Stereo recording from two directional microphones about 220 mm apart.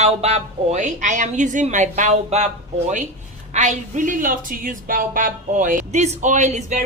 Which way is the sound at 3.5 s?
35° right (ahead or behind).